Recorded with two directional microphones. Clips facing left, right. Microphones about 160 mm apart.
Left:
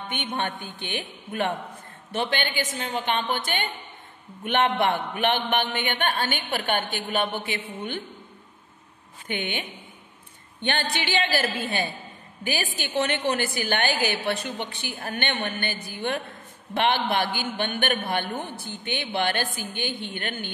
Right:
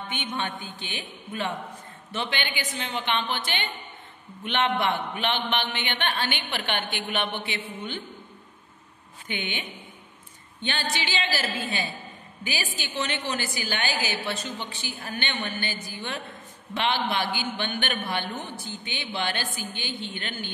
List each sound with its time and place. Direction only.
0.1 s a woman's voice: 55° left (ahead or behind)
9.3 s a man's voice: 50° left (ahead or behind)